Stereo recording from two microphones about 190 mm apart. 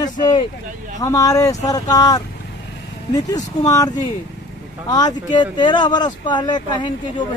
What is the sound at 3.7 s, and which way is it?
Speech, 20° left (ahead or behind).